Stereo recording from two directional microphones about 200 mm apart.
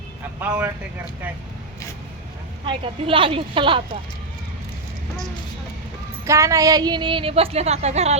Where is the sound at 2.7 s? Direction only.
25° right (ahead or behind).